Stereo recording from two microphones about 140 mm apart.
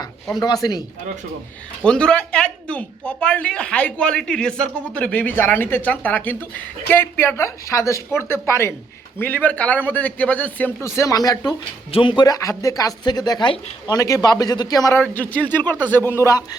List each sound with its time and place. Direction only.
0.3 s speech: 25° left (ahead or behind)
1.8 s speech: 5° left (ahead or behind); by 11.5 s 25° left (ahead or behind)
11.9 s speech: 35° left (ahead or behind)
15.0 s speech: 10° left (ahead or behind)